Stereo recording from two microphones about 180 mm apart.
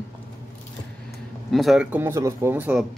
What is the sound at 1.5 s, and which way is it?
Speech, centre (ahead or behind).